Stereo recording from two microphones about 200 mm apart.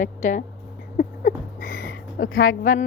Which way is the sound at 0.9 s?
45° left (ahead or behind).